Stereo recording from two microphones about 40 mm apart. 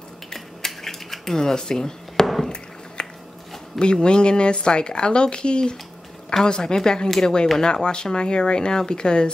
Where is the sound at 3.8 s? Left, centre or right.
Left.